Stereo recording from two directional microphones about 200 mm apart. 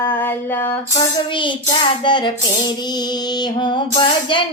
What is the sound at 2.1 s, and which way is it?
Music, 25° left (ahead or behind).